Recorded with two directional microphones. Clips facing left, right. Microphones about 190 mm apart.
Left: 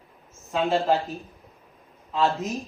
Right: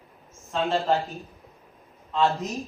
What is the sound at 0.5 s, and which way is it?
Speech, centre (ahead or behind).